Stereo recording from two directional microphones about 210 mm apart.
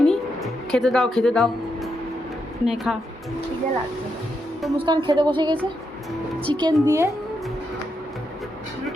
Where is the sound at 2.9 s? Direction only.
Centre (ahead or behind).